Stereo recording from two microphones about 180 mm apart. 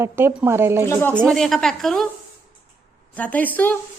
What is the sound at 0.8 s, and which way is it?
Speech, 15° left (ahead or behind).